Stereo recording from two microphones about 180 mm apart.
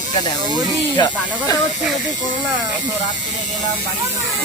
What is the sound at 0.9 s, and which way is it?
Speech, 20° left (ahead or behind).